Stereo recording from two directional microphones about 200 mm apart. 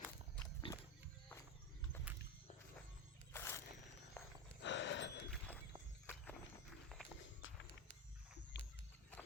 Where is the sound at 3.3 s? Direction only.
10° left (ahead or behind).